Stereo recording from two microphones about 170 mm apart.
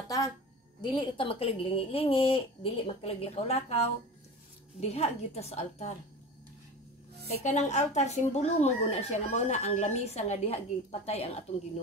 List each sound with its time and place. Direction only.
0.7 s speech: 30° left (ahead or behind)
7.4 s speech: 45° left (ahead or behind)